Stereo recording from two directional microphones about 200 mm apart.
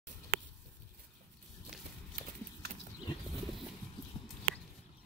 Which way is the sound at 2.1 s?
45° right (ahead or behind).